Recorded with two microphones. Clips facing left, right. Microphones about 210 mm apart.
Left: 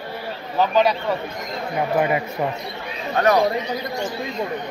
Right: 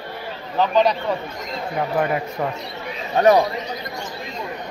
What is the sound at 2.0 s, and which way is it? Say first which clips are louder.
Speech: left 1 dB; 5° left (ahead or behind).